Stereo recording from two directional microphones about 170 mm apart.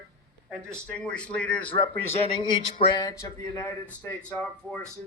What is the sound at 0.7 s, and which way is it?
Speech, 5° left (ahead or behind).